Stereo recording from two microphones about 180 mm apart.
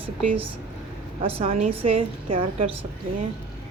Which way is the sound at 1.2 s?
35° right (ahead or behind).